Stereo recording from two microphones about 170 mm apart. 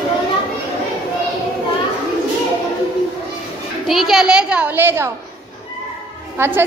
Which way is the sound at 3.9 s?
Centre (ahead or behind).